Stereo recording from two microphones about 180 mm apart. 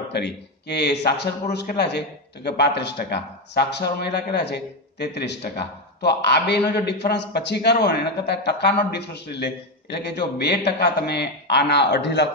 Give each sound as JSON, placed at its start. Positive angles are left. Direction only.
{"t": 0.1, "sound": "a man's voice", "side_deg": 70}